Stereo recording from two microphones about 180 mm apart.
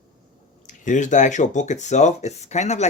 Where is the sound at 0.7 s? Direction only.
45° left (ahead or behind).